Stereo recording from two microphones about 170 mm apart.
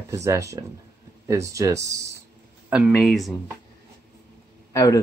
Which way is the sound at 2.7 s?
5° right (ahead or behind).